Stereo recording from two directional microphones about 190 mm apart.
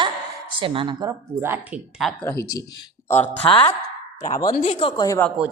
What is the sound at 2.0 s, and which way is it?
Speech, 10° left (ahead or behind).